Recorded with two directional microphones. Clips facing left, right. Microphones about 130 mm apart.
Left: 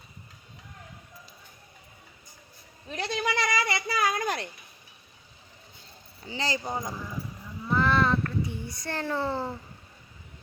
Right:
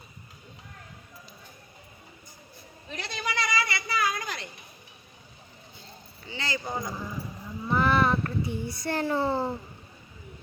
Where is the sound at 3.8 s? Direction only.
45° left (ahead or behind).